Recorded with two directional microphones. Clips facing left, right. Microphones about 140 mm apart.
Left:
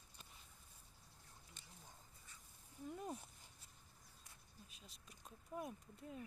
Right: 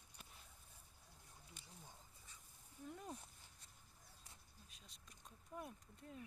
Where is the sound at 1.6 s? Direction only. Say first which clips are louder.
Right 1 dB; 10° right (ahead or behind).